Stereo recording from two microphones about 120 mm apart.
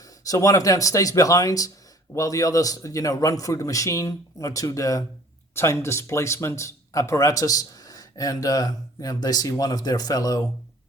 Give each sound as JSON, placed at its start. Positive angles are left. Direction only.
{"t": 0.0, "sound": "a man's voice", "side_deg": 30}